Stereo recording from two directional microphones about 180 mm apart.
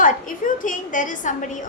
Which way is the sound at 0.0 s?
50° left (ahead or behind).